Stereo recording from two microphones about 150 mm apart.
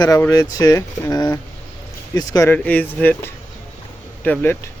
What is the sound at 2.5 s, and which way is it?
Speech, 10° left (ahead or behind).